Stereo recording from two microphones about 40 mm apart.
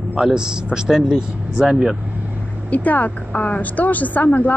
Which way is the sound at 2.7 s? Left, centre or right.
Left.